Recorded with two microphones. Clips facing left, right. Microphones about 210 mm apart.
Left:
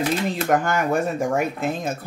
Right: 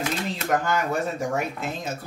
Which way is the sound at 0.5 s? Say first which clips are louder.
Left 3 dB; 50° left (ahead or behind).